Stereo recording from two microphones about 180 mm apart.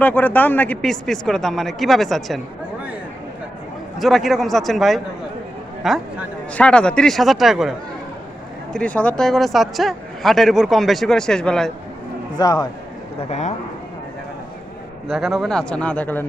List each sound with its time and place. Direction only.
0.0 s a man's voice: 10° left (ahead or behind)
3.9 s a man's voice: centre (ahead or behind)
8.7 s a man's voice: 5° left (ahead or behind)
12.4 s a man's voice: 20° left (ahead or behind)
15.0 s a man's voice: centre (ahead or behind)